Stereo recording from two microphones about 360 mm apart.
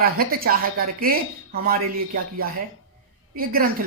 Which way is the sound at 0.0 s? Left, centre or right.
Right.